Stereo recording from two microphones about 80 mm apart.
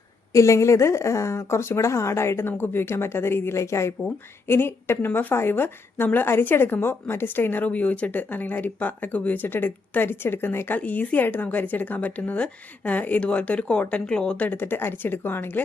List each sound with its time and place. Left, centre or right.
0.3 s a woman's voice: left